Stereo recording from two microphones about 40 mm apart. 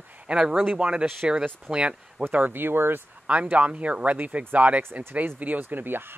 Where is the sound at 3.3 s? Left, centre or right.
Right.